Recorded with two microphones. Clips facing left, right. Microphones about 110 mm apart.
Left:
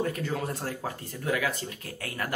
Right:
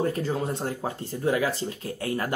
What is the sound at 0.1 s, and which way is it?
Speech, 30° right (ahead or behind).